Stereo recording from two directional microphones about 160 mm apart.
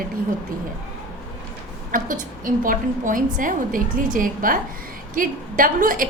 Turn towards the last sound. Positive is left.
turn(degrees=-60)  # may be behind; listen again after turning